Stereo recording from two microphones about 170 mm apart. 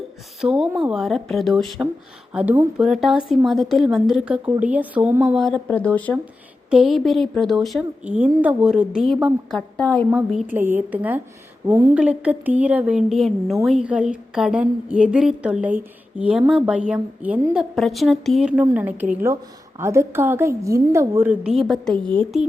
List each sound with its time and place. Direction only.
0.4 s a woman's voice: 5° right (ahead or behind)
5.6 s speech: 10° left (ahead or behind)
6.7 s a woman's voice: centre (ahead or behind)
10.1 s a woman's voice: 10° right (ahead or behind)